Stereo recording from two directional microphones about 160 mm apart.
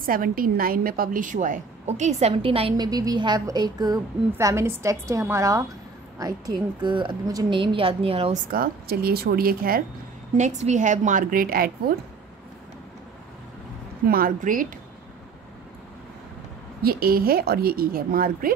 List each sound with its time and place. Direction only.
0.0 s a woman's voice: 65° right (ahead or behind); by 2.9 s 35° right (ahead or behind)
2.9 s a woman's voice: 25° right (ahead or behind)
8.5 s a woman's voice: 70° right (ahead or behind)
10.3 s a woman's voice: 45° right (ahead or behind); by 11.7 s 65° right (ahead or behind)
14.0 s a woman's voice: 65° right (ahead or behind)
16.8 s a woman's voice: 70° right (ahead or behind)